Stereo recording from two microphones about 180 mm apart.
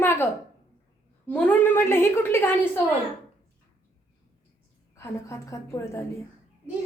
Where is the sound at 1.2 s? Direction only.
10° left (ahead or behind).